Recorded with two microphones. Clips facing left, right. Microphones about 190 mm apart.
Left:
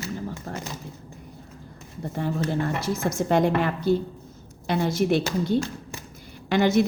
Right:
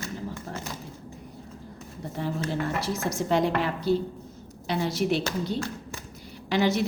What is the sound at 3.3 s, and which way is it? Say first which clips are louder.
A woman's voice: left 3 dB; 50° left (ahead or behind).